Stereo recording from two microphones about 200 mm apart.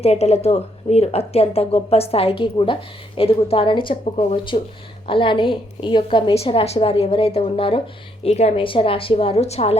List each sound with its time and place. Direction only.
0.0 s a woman's voice: 30° left (ahead or behind)